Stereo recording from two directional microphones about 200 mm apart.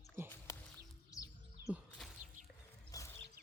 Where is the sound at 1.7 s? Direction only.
Centre (ahead or behind).